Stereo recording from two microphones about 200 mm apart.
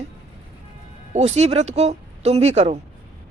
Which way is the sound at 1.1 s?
35° right (ahead or behind).